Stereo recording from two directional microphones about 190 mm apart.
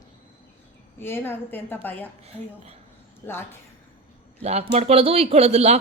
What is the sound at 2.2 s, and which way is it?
Speech, 30° right (ahead or behind).